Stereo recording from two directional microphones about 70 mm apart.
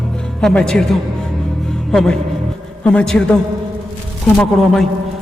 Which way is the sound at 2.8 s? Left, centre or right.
Centre.